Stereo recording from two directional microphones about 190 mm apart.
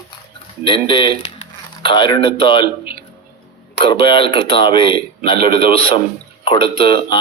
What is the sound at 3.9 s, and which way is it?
A man's voice, 25° left (ahead or behind).